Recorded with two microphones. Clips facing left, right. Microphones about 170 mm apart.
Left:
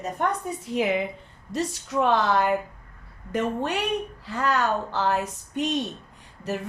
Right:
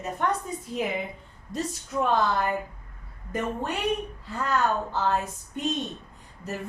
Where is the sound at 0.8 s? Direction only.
90° left.